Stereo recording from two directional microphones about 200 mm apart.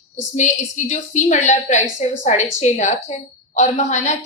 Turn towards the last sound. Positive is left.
turn(degrees=35)  # may be behind; listen again after turning